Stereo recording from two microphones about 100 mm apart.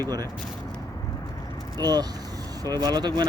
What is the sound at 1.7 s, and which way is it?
Speech, 40° right (ahead or behind).